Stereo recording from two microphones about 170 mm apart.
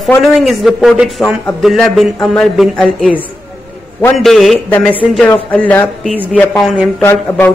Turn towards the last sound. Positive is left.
turn(degrees=10)  # may be behind; listen again after turning